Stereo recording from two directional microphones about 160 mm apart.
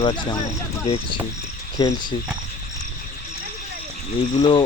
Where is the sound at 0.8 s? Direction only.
35° left (ahead or behind).